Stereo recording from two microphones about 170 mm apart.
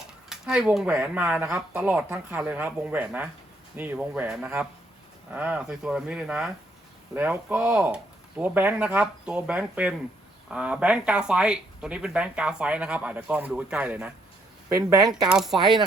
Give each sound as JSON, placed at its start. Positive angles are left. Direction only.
{"t": 0.3, "sound": "speech", "side_deg": -5}
{"t": 14.8, "sound": "speech", "side_deg": -20}
{"t": 15.2, "sound": "speech", "side_deg": 0}
{"t": 15.5, "sound": "speech", "side_deg": -25}